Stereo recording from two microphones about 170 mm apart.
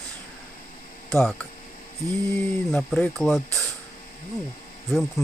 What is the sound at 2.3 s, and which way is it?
Speech, 5° left (ahead or behind).